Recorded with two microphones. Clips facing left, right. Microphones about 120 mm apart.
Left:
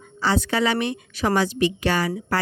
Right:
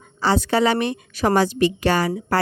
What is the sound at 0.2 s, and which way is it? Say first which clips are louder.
A woman's voice: right 3 dB; 35° right (ahead or behind).